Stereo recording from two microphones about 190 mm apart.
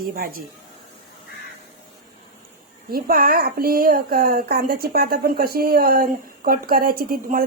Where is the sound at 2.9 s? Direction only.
50° right (ahead or behind).